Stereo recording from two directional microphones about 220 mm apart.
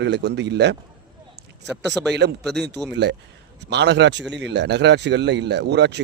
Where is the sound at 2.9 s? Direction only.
55° right (ahead or behind).